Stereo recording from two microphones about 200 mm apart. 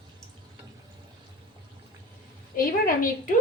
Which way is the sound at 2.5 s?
45° left (ahead or behind).